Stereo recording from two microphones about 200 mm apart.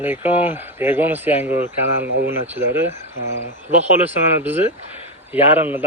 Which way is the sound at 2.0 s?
55° right (ahead or behind).